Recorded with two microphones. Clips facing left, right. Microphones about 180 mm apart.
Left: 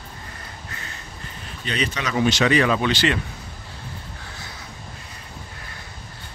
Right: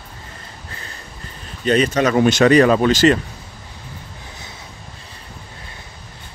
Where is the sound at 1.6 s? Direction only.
45° right (ahead or behind).